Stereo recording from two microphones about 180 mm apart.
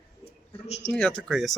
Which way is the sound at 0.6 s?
35° left (ahead or behind).